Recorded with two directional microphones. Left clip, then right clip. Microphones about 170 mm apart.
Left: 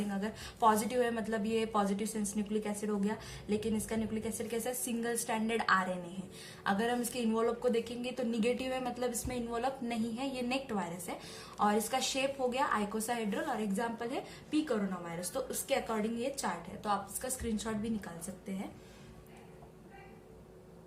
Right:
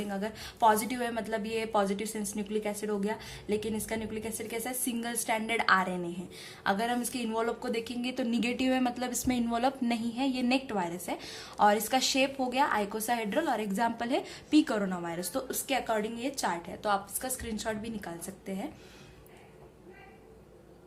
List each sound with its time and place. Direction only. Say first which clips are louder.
0.1 s a woman's voice: right 4 dB; 35° right (ahead or behind)